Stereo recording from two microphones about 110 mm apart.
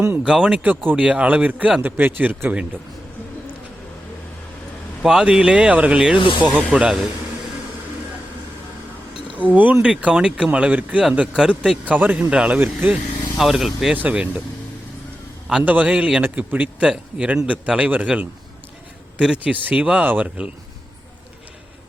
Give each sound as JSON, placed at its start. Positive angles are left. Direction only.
{"t": 0.2, "sound": "speech", "side_deg": -10}
{"t": 5.0, "sound": "speech", "side_deg": -5}
{"t": 6.1, "sound": "speech", "side_deg": 50}
{"t": 6.4, "sound": "speech", "side_deg": -15}
{"t": 9.4, "sound": "speech", "side_deg": -15}
{"t": 13.3, "sound": "speech", "side_deg": -5}
{"t": 13.9, "sound": "speech", "side_deg": -15}
{"t": 15.4, "sound": "speech", "side_deg": -10}